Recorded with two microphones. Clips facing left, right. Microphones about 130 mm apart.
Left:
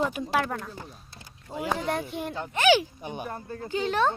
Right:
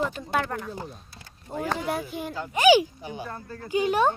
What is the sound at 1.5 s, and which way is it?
Speech, 10° left (ahead or behind).